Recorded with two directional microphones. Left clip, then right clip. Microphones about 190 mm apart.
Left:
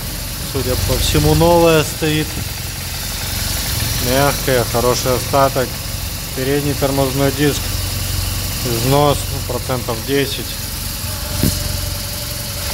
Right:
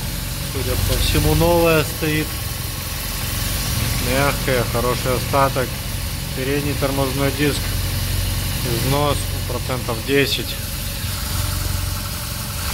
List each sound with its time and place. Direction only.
1.1 s speech: 20° left (ahead or behind)
4.1 s speech: 15° left (ahead or behind)
8.9 s speech: 20° left (ahead or behind); by 10.4 s 5° left (ahead or behind)